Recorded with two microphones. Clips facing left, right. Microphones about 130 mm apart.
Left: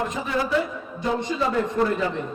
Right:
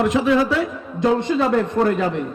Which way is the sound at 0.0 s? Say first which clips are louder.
Right 9 dB; 85° right.